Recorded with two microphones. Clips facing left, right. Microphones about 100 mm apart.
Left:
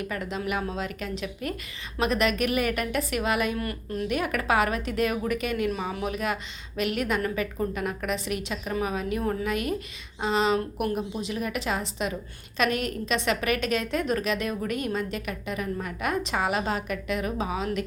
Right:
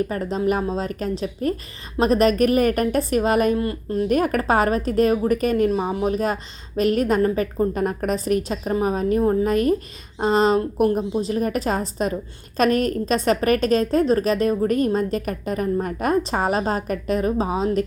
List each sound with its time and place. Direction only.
0.0 s a woman's voice: 35° right (ahead or behind)
3.6 s speech: 25° right (ahead or behind)
4.1 s a woman's voice: 40° right (ahead or behind)